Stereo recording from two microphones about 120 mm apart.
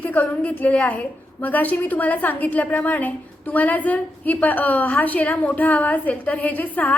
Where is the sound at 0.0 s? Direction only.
15° left (ahead or behind).